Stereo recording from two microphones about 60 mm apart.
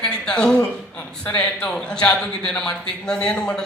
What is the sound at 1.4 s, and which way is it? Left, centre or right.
Speech, centre.